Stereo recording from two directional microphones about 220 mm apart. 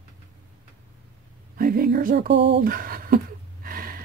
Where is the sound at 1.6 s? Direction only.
40° right (ahead or behind).